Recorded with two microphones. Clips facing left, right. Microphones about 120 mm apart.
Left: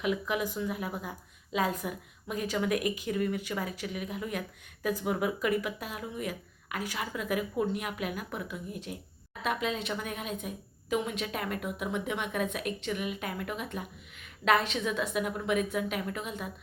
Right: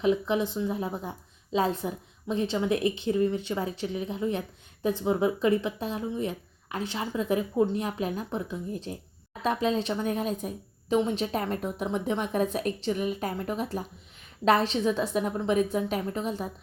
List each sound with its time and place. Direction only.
0.0 s a woman's voice: 30° right (ahead or behind)